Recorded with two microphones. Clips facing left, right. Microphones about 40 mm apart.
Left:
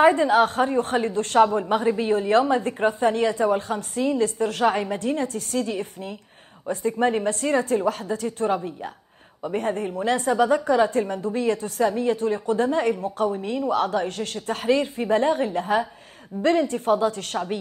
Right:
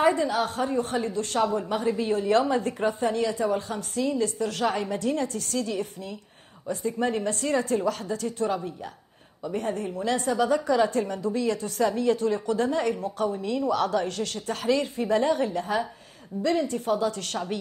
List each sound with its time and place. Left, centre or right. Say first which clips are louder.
0.0 s a woman's voice: left 6 dB; left